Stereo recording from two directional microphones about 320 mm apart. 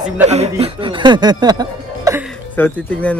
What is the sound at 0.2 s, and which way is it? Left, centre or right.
Speech, centre.